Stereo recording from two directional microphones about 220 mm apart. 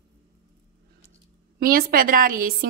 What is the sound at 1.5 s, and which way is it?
A woman's voice, 40° right (ahead or behind).